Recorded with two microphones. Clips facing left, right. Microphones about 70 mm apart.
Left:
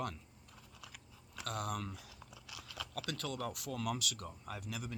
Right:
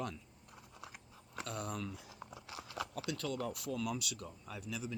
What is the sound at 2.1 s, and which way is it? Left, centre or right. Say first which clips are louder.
Biting: right 5 dB; right.